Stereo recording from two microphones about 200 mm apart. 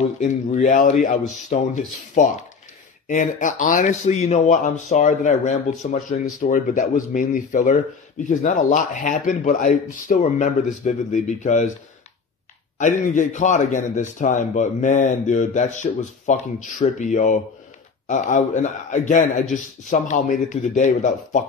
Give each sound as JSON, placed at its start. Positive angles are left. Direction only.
{"t": 0.2, "sound": "a man's voice", "side_deg": 40}
{"t": 12.7, "sound": "a man's voice", "side_deg": 40}